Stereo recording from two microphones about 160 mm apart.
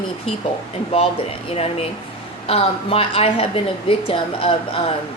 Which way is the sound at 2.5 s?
35° left (ahead or behind).